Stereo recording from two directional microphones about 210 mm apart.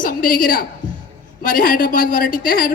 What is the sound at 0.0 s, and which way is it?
Speech, 40° left (ahead or behind).